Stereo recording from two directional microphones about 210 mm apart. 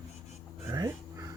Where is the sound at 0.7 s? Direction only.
15° right (ahead or behind).